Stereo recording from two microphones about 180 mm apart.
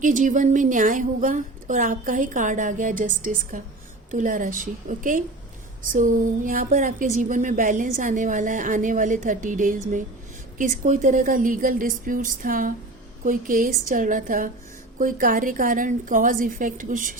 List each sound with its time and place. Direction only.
0.0 s a woman's voice: 45° right (ahead or behind)